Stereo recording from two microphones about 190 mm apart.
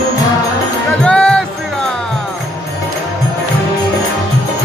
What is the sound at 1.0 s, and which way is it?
Music, 5° left (ahead or behind).